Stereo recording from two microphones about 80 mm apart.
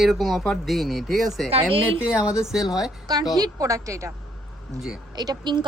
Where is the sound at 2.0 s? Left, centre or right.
Centre.